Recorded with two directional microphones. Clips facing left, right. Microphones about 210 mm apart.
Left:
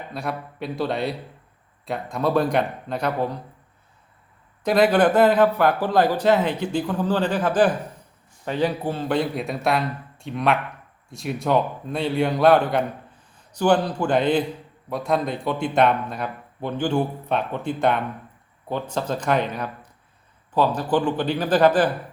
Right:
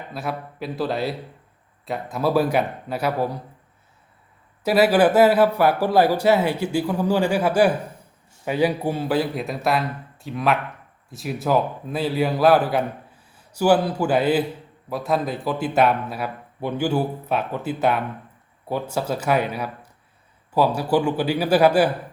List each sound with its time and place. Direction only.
0.1 s speech: centre (ahead or behind)
4.6 s a man's voice: 5° right (ahead or behind)